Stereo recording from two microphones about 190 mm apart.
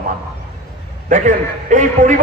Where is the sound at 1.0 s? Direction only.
40° right (ahead or behind).